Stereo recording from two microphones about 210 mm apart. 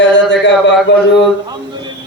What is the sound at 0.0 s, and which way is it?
Speech, 60° left (ahead or behind).